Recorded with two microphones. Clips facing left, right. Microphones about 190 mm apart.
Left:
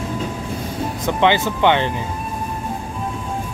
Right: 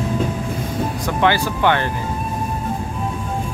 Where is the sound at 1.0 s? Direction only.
20° left (ahead or behind).